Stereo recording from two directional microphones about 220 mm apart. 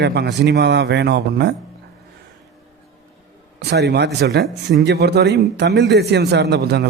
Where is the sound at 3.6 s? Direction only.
50° right (ahead or behind).